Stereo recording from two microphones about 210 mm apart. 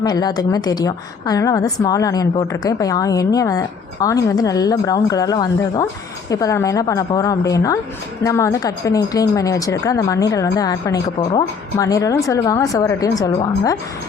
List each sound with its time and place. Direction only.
0.0 s a woman's voice: 20° left (ahead or behind)